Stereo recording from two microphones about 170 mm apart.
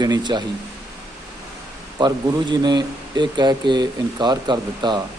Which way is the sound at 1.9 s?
25° right (ahead or behind).